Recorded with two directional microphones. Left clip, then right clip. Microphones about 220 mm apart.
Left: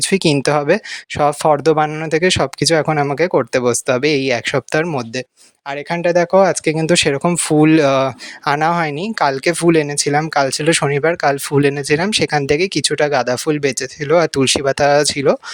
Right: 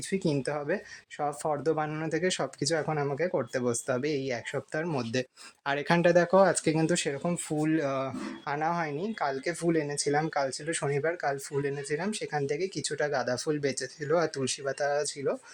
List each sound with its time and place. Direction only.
0.0 s speech: 45° left (ahead or behind)